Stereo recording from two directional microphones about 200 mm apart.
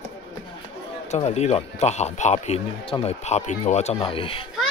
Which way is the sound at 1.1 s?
35° left (ahead or behind).